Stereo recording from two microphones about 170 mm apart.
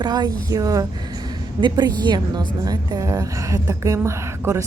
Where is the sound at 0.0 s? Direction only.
25° right (ahead or behind).